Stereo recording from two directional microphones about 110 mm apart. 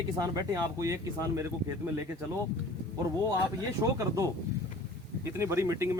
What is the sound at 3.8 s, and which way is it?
Speech, 30° right (ahead or behind).